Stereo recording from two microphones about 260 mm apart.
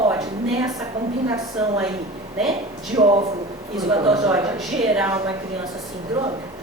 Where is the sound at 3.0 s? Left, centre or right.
Right.